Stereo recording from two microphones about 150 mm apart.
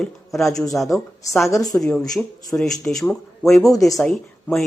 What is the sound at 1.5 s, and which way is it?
Speech, 25° left (ahead or behind).